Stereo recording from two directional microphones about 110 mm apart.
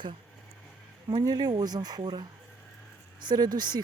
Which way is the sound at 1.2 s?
40° right (ahead or behind).